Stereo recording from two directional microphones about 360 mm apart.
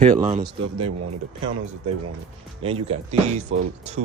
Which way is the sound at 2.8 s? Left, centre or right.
Centre.